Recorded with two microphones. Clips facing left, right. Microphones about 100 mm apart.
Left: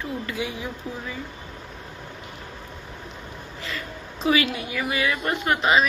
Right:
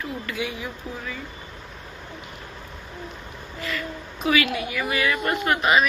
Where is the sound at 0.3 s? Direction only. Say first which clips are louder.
Even; 25° left (ahead or behind).